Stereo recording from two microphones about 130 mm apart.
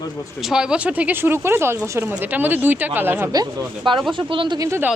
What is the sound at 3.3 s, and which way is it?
Speech, 35° right (ahead or behind).